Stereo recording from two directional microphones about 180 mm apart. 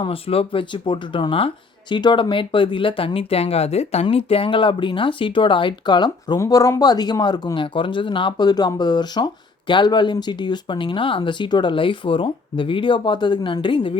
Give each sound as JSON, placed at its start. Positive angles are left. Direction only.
{"t": 0.0, "sound": "speech", "side_deg": 30}